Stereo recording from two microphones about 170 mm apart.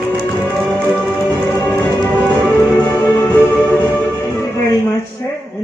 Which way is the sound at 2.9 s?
25° left (ahead or behind).